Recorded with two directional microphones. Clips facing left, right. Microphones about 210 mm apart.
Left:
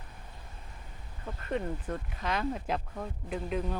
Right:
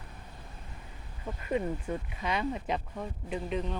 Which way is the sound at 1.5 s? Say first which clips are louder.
Right 2 dB; 5° right (ahead or behind).